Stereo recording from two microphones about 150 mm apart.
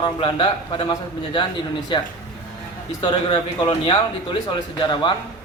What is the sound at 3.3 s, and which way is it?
A man's voice, 35° left (ahead or behind).